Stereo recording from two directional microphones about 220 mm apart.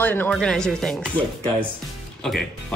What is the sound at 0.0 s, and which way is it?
Speech, 10° left (ahead or behind).